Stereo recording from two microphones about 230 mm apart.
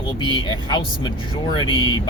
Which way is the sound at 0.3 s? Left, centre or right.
Centre.